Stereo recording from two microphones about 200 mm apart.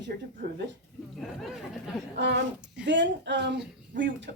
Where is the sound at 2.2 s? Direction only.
60° right (ahead or behind).